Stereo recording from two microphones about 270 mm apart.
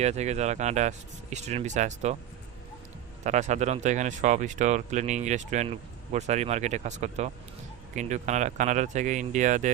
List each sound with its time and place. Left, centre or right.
0.0 s speech: right
3.2 s speech: right